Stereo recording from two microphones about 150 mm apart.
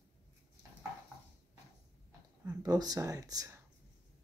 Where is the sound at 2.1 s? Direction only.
25° right (ahead or behind).